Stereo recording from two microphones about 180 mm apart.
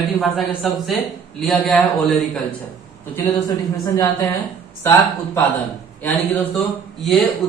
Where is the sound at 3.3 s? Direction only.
20° left (ahead or behind).